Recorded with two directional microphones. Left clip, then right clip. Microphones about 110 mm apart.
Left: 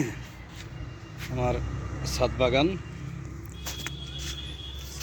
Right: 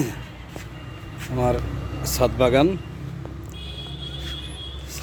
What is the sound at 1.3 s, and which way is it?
Speech, 45° right (ahead or behind).